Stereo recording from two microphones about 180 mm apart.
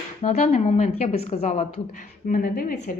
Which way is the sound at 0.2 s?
40° left (ahead or behind).